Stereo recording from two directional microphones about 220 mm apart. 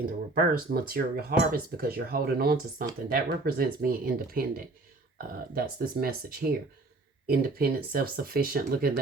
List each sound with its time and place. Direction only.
0.3 s speech: 40° right (ahead or behind)
7.3 s speech: 45° right (ahead or behind)